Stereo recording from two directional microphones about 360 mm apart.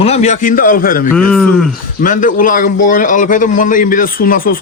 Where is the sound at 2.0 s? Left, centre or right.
Left.